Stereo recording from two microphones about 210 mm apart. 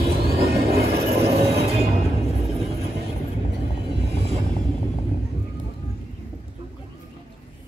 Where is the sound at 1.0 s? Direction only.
30° right (ahead or behind).